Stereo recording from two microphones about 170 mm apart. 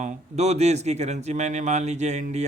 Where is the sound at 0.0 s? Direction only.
40° right (ahead or behind).